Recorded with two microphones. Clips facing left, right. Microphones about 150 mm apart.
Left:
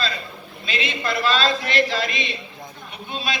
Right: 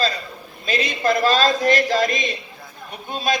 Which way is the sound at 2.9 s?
45° right (ahead or behind).